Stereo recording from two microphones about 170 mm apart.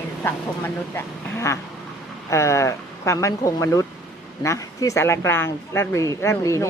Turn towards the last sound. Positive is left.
turn(degrees=20)  # may be behind; listen again after turning